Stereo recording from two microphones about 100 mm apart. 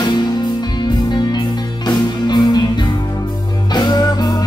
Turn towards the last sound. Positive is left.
turn(degrees=40)  # may be behind; listen again after turning